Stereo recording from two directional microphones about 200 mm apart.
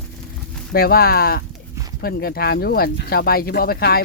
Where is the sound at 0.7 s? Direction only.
50° left (ahead or behind).